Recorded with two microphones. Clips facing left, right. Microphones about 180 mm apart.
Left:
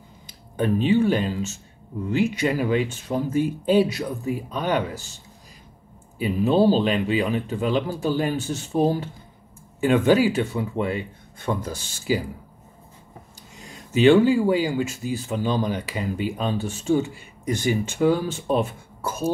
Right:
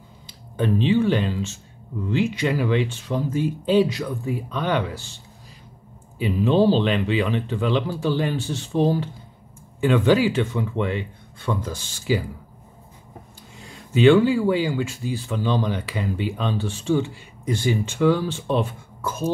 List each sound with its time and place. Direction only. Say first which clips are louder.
0.6 s speech: even; 45° left (ahead or behind)
9.8 s speech: even; 45° left (ahead or behind)
13.9 s speech: even; 40° left (ahead or behind)